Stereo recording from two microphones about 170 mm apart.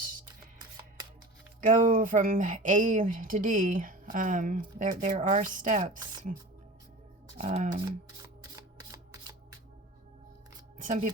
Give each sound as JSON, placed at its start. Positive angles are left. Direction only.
{"t": 1.9, "sound": "speech", "side_deg": -50}
{"t": 7.3, "sound": "speech", "side_deg": -45}
{"t": 8.5, "sound": "camera", "side_deg": -20}
{"t": 10.8, "sound": "shuffling cards", "side_deg": -50}